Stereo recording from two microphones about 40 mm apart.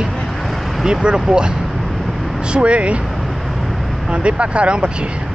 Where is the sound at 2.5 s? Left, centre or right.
Right.